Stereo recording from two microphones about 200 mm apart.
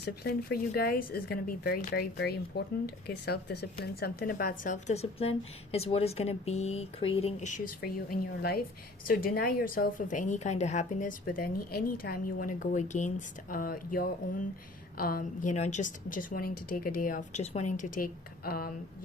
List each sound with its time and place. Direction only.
0.0 s speech: 50° left (ahead or behind)